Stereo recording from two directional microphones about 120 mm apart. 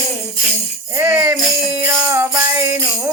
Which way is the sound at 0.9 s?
15° right (ahead or behind).